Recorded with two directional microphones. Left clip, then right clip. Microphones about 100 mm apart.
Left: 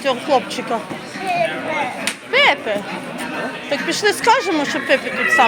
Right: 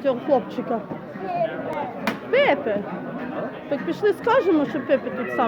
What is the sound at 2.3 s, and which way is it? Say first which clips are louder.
Speech: left 4 dB; 50° right (ahead or behind).